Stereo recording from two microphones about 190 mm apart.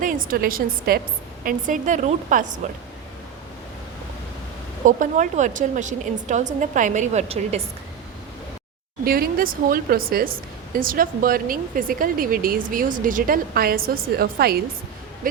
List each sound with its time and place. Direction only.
0.0 s speech: 45° right (ahead or behind)
4.9 s a woman's voice: 40° right (ahead or behind)
9.0 s speech: 50° right (ahead or behind)